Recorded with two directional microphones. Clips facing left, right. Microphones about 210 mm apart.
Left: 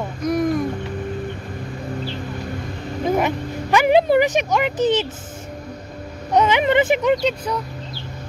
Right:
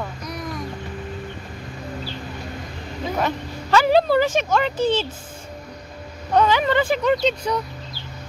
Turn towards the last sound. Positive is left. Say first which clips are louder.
# even
turn(degrees=5)  # may be behind; listen again after turning